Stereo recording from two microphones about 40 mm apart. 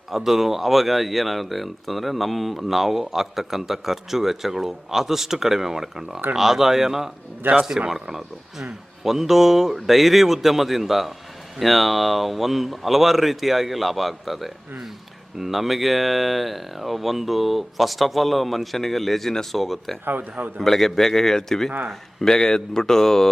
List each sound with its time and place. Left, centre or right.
0.1 s speech: centre
7.4 s a man's voice: right
7.9 s a man's voice: centre